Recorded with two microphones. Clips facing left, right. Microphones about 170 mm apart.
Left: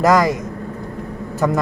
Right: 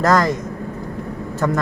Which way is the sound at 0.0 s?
10° left (ahead or behind).